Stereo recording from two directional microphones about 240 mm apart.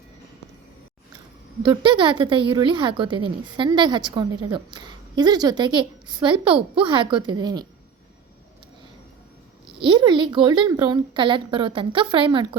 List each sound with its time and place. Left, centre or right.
1.6 s a woman's voice: centre
9.6 s a woman's voice: centre